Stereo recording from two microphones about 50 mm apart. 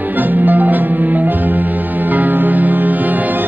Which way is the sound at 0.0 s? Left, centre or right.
Right.